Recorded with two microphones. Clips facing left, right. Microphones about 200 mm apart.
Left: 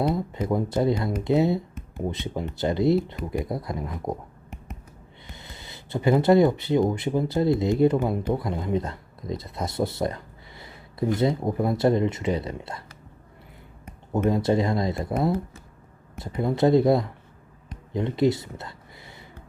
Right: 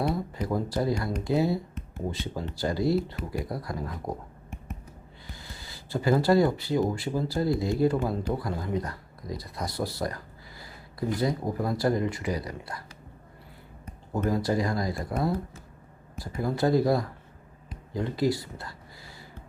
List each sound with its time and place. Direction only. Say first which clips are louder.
0.0 s speech: left 4 dB; 20° left (ahead or behind)
5.3 s speech: left 1 dB; 20° left (ahead or behind)
14.1 s speech: left 4 dB; 25° left (ahead or behind)
17.9 s a sound: left 4 dB; 20° left (ahead or behind)